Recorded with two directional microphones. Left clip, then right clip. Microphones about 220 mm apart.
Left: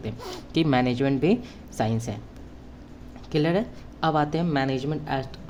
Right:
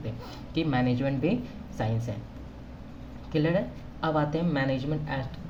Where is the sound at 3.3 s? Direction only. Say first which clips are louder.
Left 3 dB; 55° left (ahead or behind).